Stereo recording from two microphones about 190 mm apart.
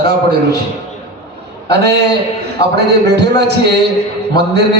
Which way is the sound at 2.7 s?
60° right (ahead or behind).